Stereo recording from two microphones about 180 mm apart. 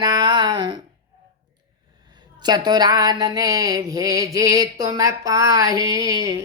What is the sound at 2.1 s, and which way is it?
Speech, 25° right (ahead or behind).